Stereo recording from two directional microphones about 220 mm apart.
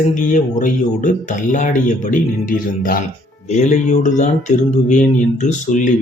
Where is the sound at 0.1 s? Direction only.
35° left (ahead or behind).